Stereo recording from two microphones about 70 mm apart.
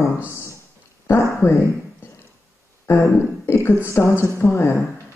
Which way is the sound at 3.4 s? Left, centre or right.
Left.